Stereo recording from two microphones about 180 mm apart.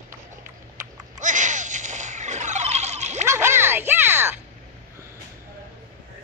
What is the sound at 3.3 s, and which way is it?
Music, 15° right (ahead or behind).